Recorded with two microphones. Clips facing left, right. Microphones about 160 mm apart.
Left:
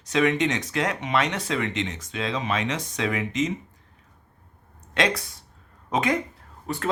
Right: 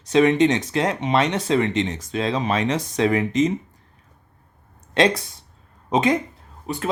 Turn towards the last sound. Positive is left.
turn(degrees=-20)  # may be behind; listen again after turning